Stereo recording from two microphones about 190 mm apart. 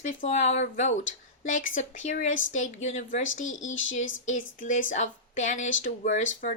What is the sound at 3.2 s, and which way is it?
Speech, 90° left.